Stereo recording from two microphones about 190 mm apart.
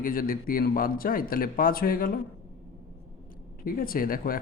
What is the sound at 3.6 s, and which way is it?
Speech, 50° left (ahead or behind).